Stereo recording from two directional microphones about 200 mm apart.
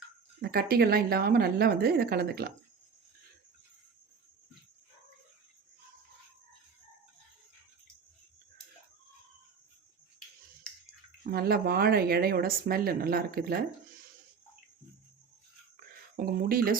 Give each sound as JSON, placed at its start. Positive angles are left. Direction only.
{"t": 0.4, "sound": "speech", "side_deg": -50}
{"t": 10.7, "sound": "bathtub", "side_deg": 5}
{"t": 11.2, "sound": "speech", "side_deg": -50}
{"t": 16.1, "sound": "speech", "side_deg": -50}